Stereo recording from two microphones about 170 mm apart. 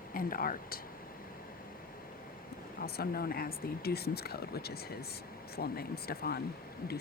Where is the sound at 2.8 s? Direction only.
65° left (ahead or behind).